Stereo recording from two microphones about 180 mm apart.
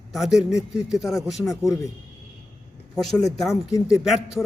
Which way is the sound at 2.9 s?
Centre (ahead or behind).